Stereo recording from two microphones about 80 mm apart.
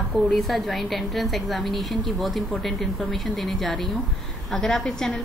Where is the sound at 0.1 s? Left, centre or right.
Centre.